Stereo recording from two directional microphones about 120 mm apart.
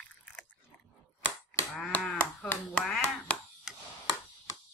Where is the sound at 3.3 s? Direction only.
10° left (ahead or behind).